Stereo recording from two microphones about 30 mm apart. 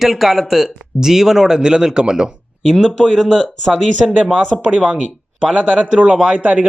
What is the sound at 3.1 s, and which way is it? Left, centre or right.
Speech, centre.